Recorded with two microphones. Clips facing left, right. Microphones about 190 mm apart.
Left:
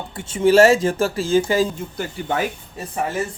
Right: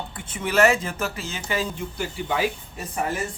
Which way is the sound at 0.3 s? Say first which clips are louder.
Left 7 dB; 25° left (ahead or behind).